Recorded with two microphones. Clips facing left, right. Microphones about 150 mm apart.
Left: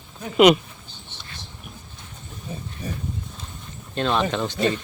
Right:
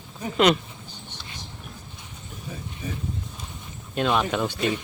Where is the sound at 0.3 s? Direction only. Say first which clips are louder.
Left 5 dB; 10° left (ahead or behind).